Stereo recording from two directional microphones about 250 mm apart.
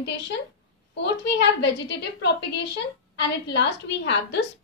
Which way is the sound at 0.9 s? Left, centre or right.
Left.